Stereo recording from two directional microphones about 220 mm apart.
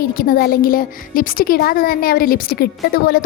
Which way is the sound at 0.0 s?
40° left (ahead or behind).